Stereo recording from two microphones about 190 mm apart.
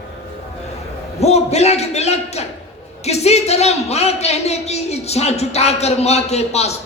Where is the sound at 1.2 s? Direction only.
35° left (ahead or behind).